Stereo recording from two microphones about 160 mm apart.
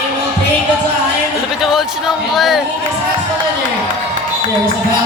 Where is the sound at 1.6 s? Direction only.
Centre (ahead or behind).